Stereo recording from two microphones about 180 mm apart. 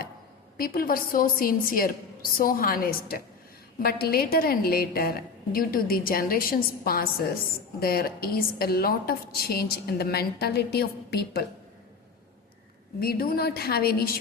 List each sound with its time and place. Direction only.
0.5 s a woman's voice: 55° left (ahead or behind)
13.0 s a woman's voice: 55° left (ahead or behind)